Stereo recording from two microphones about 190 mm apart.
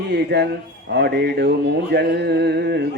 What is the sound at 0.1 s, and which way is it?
Carnatic music, 60° right (ahead or behind).